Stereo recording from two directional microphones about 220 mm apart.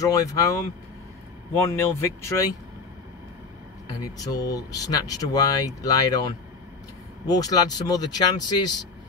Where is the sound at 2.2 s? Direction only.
15° left (ahead or behind).